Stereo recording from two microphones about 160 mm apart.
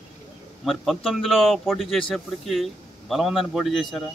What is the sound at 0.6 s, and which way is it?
A man's voice, centre (ahead or behind).